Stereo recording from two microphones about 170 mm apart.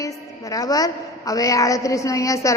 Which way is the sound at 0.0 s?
20° left (ahead or behind).